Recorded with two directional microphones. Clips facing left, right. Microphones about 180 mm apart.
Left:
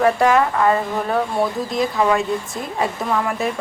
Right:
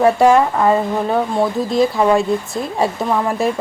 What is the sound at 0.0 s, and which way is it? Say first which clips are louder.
A woman's voice: right 4 dB; 25° right (ahead or behind).